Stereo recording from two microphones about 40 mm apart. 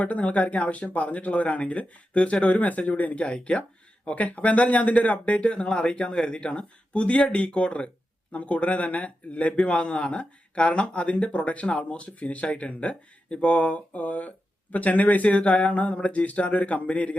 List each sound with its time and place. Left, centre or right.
0.0 s speech: left
3.2 s speech: left
3.6 s speech: left